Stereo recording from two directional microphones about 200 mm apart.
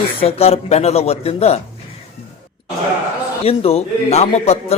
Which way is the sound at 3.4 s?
30° left (ahead or behind).